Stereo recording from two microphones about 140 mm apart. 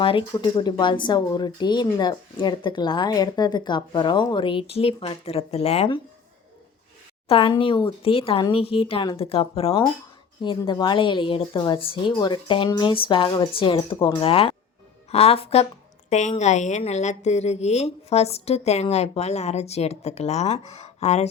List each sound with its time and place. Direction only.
0.0 s speech: 40° left (ahead or behind)
7.3 s a woman's voice: 40° left (ahead or behind)
16.0 s a woman's voice: 55° left (ahead or behind)